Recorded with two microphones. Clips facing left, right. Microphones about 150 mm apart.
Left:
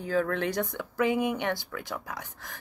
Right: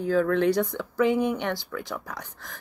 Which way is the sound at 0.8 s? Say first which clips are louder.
Right 1 dB; 15° left (ahead or behind).